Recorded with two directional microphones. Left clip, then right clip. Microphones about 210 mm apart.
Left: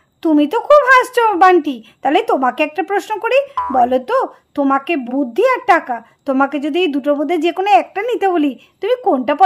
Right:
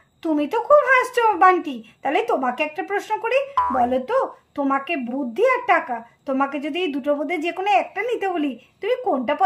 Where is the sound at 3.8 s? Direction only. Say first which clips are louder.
Left 11 dB; 40° left (ahead or behind).